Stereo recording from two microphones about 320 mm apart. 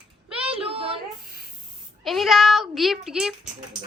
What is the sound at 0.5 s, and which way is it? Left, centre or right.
Child singing, centre.